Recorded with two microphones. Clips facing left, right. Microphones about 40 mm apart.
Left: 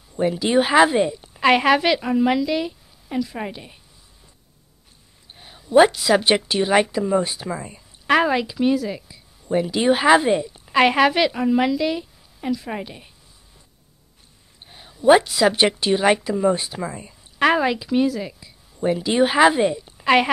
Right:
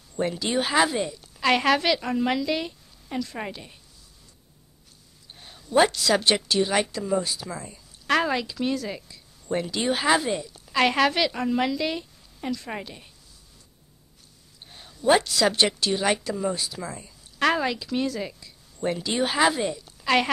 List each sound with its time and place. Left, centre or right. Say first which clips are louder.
0.1 s a woman's voice: left 7 dB; centre
5.3 s a woman's voice: left 7 dB; centre
14.7 s a woman's voice: left 6 dB; centre
18.4 s a sound: left 5 dB; centre
19.1 s a woman's voice: left 7 dB; left